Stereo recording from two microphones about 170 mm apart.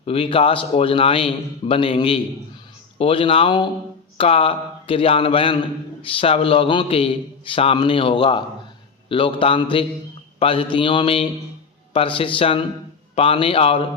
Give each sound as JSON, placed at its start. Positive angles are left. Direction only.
{"t": 0.0, "sound": "a man's voice", "side_deg": 35}